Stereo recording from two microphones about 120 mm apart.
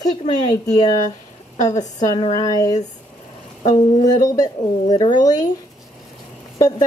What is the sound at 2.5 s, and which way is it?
A woman's voice, 30° left (ahead or behind).